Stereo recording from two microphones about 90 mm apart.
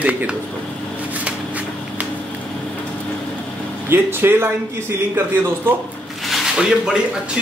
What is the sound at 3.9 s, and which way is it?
Speech, 25° right (ahead or behind).